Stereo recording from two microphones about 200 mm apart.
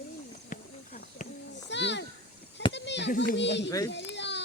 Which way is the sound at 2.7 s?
60° left (ahead or behind).